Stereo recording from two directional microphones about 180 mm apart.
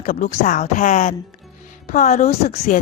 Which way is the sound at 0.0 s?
50° left (ahead or behind).